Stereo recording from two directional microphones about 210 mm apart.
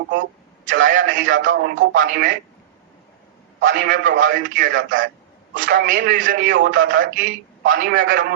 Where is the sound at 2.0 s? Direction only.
40° right (ahead or behind).